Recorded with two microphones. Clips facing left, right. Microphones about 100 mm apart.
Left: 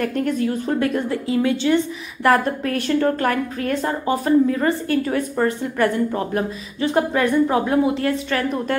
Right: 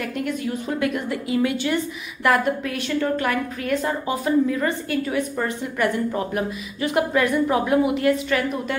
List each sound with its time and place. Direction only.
0.0 s a woman's voice: 40° left (ahead or behind)